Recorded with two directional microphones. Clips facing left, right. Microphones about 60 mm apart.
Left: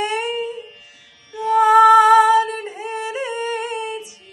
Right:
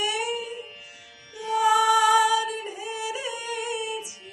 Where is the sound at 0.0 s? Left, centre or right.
Left.